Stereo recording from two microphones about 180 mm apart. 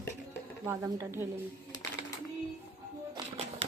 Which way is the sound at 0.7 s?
15° right (ahead or behind).